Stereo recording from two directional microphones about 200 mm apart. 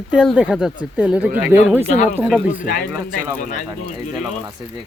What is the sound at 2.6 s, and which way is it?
Speech, 45° left (ahead or behind).